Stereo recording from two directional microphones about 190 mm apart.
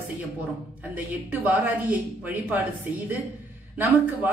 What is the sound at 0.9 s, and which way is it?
Speech, 10° right (ahead or behind).